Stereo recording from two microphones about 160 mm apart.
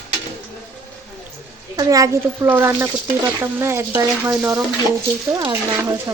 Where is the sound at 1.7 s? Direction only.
20° right (ahead or behind).